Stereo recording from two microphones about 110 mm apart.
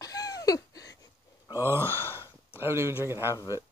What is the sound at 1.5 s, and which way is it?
Speech, 20° right (ahead or behind).